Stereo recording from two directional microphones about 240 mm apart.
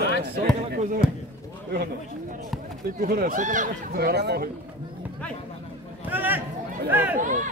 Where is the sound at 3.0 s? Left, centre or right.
Right.